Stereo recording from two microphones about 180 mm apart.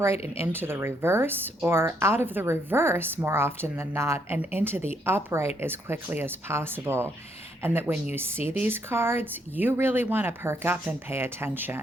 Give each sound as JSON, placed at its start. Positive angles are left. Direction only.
{"t": 0.3, "sound": "speech", "side_deg": -10}